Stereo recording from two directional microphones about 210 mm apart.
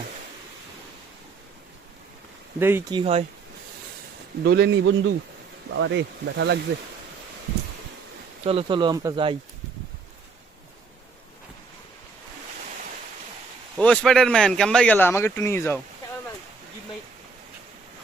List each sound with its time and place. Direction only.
2.6 s speech: 10° right (ahead or behind)
2.9 s speech: 30° right (ahead or behind)
4.4 s speech: 50° right (ahead or behind)
8.4 s speech: 25° right (ahead or behind)
13.7 s speech: 5° left (ahead or behind)